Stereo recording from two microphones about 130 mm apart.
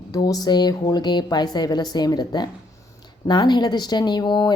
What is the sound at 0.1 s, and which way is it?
Speech, 30° left (ahead or behind).